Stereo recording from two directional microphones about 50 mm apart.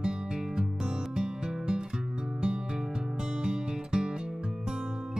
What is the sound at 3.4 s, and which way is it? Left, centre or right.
Music, centre.